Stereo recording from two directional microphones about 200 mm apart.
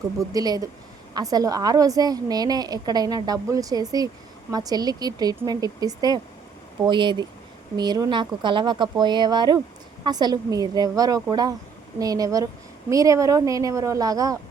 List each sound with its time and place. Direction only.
0.3 s a woman's voice: 20° right (ahead or behind)